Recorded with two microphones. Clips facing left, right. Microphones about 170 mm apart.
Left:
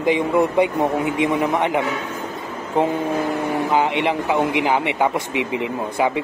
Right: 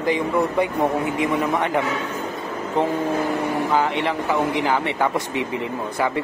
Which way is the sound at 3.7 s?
20° left (ahead or behind).